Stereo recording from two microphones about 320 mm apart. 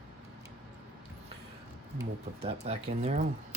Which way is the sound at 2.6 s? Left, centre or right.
Right.